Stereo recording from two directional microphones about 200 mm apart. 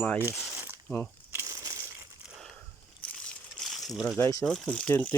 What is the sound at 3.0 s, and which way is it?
Crumpling, 5° left (ahead or behind).